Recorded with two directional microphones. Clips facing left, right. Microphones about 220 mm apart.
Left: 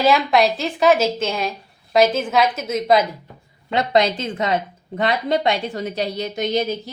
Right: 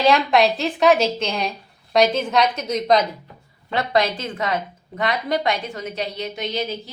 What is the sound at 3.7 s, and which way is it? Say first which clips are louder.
A woman's voice: left 3 dB; 20° left (ahead or behind).